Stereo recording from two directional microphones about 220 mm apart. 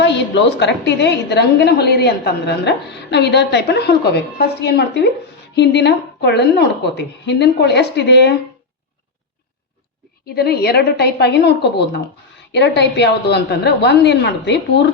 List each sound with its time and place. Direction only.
0.0 s a woman's voice: 50° left (ahead or behind)
10.2 s a woman's voice: 45° left (ahead or behind)